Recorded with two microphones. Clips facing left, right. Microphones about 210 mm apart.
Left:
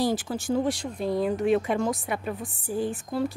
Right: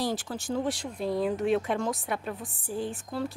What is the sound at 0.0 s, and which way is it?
Speech, centre (ahead or behind).